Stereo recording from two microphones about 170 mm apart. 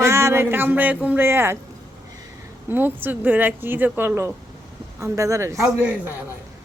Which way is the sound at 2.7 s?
10° right (ahead or behind).